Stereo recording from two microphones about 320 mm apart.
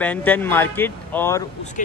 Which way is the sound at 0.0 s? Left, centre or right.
Centre.